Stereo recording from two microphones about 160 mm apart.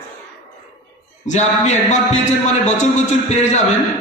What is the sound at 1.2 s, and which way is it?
A man's voice, 45° left (ahead or behind).